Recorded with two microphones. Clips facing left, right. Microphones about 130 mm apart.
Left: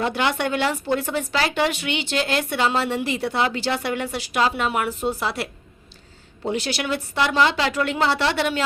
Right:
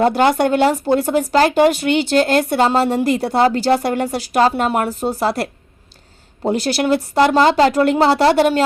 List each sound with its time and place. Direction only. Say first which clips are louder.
0.0 s speech: right 9 dB; 45° right (ahead or behind)